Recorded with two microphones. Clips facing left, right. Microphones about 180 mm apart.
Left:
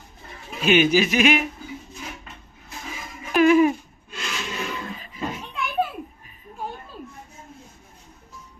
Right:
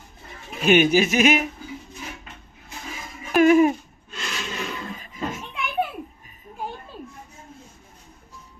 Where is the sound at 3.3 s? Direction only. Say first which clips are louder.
Right 1 dB; 45° right (ahead or behind).